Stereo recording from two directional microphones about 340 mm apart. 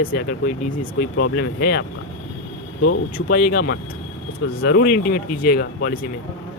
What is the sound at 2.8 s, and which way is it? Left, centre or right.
Speech, left.